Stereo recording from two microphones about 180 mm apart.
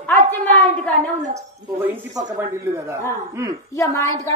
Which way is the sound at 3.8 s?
15° left (ahead or behind).